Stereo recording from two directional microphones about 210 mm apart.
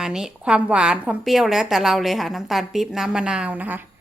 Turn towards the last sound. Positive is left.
turn(degrees=-10)  # may be behind; listen again after turning